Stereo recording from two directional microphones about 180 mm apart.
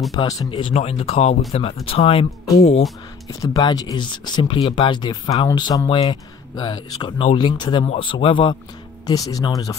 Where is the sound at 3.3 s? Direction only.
20° left (ahead or behind).